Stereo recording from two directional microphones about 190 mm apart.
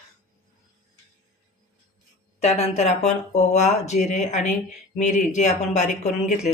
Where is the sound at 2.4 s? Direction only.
35° left (ahead or behind).